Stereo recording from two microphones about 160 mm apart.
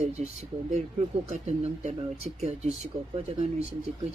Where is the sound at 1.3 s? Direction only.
45° right (ahead or behind).